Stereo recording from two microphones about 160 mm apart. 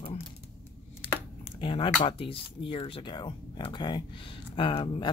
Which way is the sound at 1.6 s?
35° left (ahead or behind).